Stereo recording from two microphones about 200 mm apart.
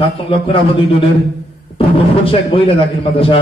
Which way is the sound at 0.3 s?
25° left (ahead or behind).